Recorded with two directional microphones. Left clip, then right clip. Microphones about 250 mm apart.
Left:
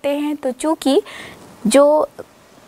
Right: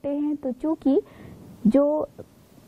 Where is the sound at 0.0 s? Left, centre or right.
Centre.